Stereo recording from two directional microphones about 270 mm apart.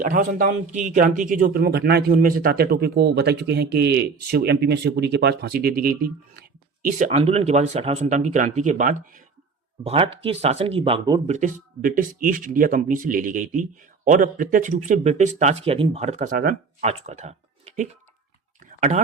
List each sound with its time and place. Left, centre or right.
0.0 s a man's voice: right
11.3 s speech: right
18.6 s a sound: right